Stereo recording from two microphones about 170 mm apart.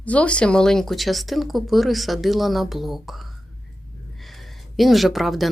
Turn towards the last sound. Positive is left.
turn(degrees=0)  # may be behind; listen again after turning